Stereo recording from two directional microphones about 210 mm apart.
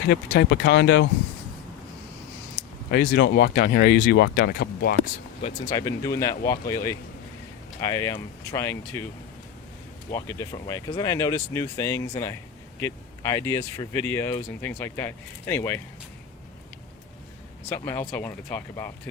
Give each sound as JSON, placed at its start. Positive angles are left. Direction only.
{"t": 0.1, "sound": "speech", "side_deg": 55}
{"t": 2.6, "sound": "a sound", "side_deg": 50}
{"t": 2.9, "sound": "speech", "side_deg": 50}
{"t": 5.6, "sound": "speech", "side_deg": 15}
{"t": 10.1, "sound": "speech", "side_deg": 15}
{"t": 17.7, "sound": "speech", "side_deg": 10}